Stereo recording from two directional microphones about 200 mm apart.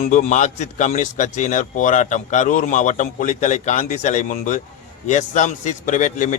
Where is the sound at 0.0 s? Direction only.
40° left (ahead or behind).